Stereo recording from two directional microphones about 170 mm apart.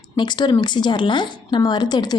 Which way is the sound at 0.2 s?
25° left (ahead or behind).